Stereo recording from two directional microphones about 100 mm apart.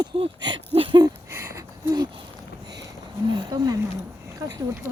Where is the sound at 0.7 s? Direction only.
60° right (ahead or behind).